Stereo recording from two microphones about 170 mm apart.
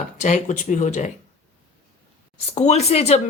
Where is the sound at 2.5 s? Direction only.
40° left (ahead or behind).